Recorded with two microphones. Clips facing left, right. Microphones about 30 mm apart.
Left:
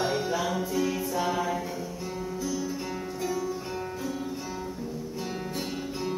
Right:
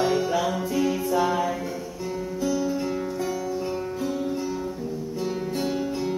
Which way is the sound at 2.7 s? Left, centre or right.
Centre.